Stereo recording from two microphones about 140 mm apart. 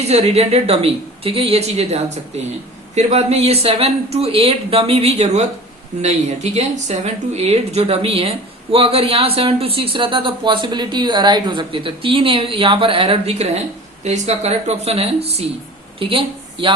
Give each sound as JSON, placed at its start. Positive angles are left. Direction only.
{"t": 0.0, "sound": "speech", "side_deg": -50}